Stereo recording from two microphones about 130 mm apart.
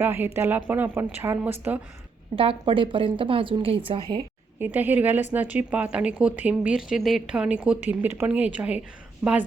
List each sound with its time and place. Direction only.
0.0 s speech: 15° right (ahead or behind)
2.3 s a woman's voice: 45° right (ahead or behind)
4.6 s speech: 15° right (ahead or behind)